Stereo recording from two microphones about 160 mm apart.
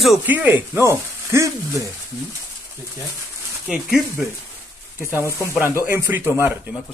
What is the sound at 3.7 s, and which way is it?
Speech, 5° right (ahead or behind).